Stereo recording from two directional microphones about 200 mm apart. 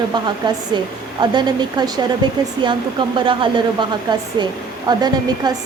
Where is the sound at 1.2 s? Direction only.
20° right (ahead or behind).